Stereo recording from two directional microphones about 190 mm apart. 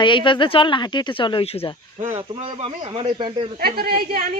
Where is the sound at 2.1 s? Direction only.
30° right (ahead or behind).